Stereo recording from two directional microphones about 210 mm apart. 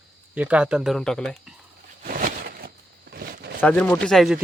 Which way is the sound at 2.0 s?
40° right (ahead or behind).